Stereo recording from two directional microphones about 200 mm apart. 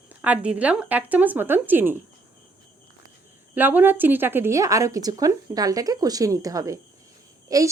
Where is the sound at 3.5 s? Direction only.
10° right (ahead or behind).